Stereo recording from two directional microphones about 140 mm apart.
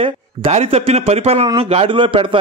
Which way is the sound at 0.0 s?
45° right (ahead or behind).